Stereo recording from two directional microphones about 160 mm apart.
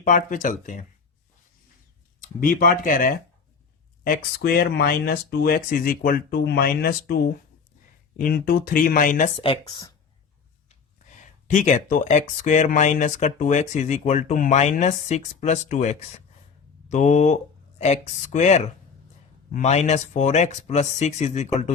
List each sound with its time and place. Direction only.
0.0 s speech: 55° left (ahead or behind)
2.2 s speech: 60° left (ahead or behind); by 7.2 s 80° left
8.1 s speech: 65° left (ahead or behind)
9.4 s speech: 30° left (ahead or behind)
10.7 s speech: 50° left (ahead or behind)